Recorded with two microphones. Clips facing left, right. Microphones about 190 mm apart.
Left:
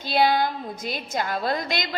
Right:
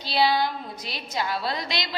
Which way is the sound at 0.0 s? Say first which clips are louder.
Left 2 dB; 50° left (ahead or behind).